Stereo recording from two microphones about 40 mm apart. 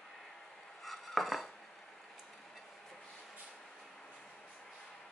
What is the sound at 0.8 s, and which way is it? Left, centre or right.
Dishes, centre.